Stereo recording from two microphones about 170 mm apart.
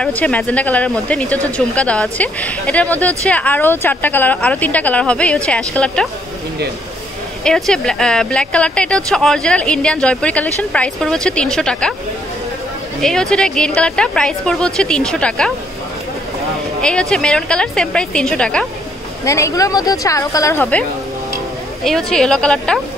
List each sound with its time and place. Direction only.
0.0 s speech: 10° left (ahead or behind)
7.4 s speech: 5° left (ahead or behind)
13.0 s speech: 5° left (ahead or behind)
16.8 s speech: 5° left (ahead or behind)
19.2 s speech: 20° left (ahead or behind)
21.8 s speech: 5° left (ahead or behind)